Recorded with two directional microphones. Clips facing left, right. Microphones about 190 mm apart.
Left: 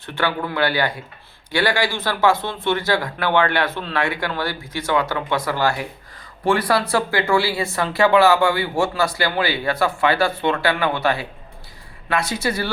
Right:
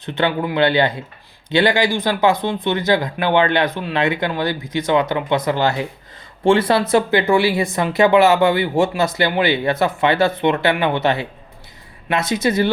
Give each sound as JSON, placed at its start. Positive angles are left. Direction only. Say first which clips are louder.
{"t": 0.0, "sound": "speech", "louder": "right 4 dB", "side_deg": -20}